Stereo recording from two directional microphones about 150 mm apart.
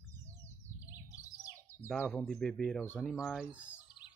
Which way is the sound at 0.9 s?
20° left (ahead or behind).